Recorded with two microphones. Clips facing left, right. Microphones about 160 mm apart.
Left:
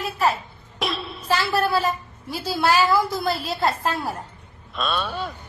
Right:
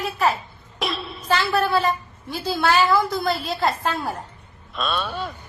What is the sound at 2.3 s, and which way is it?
A woman's voice, 10° left (ahead or behind).